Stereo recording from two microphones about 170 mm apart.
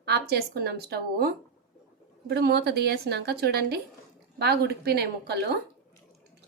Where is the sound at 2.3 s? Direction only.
70° right (ahead or behind).